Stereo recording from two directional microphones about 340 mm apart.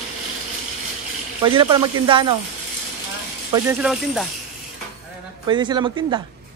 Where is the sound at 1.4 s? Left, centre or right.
Centre.